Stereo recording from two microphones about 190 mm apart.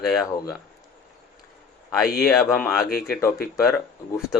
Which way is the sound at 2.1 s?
Centre (ahead or behind).